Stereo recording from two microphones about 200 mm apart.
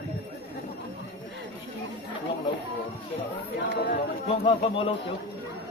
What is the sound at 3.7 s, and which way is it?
Speech, 55° left (ahead or behind).